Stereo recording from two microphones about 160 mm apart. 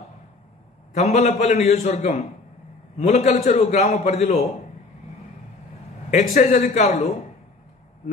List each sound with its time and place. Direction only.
0.9 s a man's voice: 45° left (ahead or behind)
6.0 s speech: 55° left (ahead or behind)
6.6 s a man's voice: 45° left (ahead or behind)